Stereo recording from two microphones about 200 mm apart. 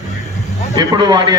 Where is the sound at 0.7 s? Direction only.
20° right (ahead or behind).